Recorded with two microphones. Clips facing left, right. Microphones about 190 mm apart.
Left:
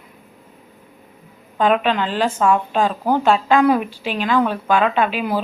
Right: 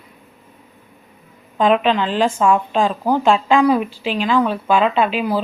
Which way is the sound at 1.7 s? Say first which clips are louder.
Right 2 dB; 5° left (ahead or behind).